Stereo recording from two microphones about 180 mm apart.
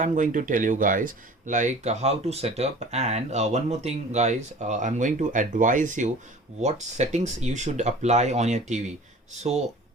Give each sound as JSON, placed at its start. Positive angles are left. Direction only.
{"t": 0.0, "sound": "speech", "side_deg": -45}